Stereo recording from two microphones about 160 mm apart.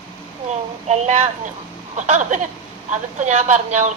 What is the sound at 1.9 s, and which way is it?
Speech, 50° right (ahead or behind).